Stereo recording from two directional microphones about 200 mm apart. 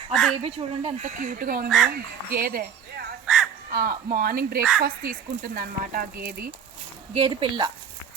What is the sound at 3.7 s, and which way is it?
Speech, 50° right (ahead or behind).